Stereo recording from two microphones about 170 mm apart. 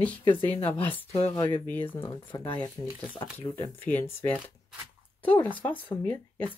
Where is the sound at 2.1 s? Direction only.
25° left (ahead or behind).